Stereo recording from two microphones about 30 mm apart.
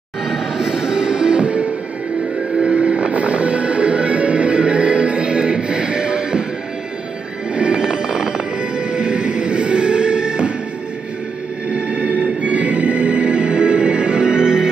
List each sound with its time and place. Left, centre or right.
0.7 s music: right
2.5 s music: right
7.5 s music: right
11.7 s music: right